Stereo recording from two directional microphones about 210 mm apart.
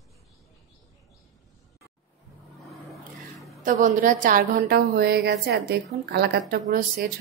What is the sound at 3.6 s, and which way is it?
A woman's voice, 40° right (ahead or behind).